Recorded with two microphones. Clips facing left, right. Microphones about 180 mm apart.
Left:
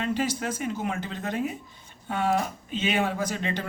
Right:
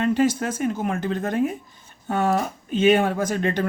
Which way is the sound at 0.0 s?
50° right (ahead or behind).